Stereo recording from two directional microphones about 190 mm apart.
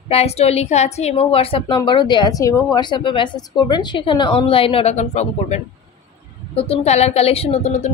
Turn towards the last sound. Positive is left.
turn(degrees=35)  # may be behind; listen again after turning